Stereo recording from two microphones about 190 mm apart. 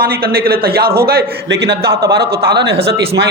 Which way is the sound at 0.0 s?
55° right (ahead or behind).